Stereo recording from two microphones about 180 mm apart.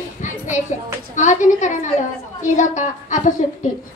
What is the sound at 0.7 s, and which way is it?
A child's voice, 40° left (ahead or behind).